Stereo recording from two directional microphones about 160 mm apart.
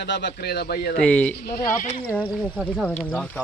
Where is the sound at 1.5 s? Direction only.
80° left.